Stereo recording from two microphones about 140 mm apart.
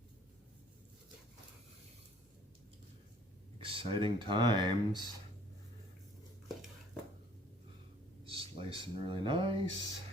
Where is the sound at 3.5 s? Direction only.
40° right (ahead or behind).